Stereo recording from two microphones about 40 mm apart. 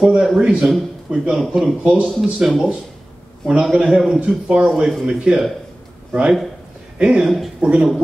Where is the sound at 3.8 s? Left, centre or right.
Centre.